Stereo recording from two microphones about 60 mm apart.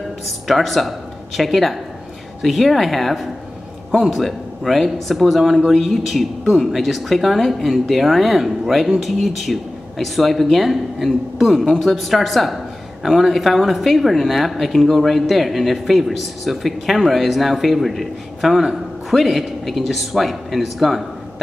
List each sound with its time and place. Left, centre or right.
0.5 s a woman's voice: centre